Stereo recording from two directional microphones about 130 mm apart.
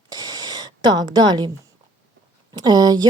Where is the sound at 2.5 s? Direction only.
30° right (ahead or behind).